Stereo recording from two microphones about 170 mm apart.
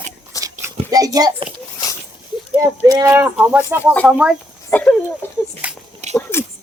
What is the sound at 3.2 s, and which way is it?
Speech, 10° right (ahead or behind).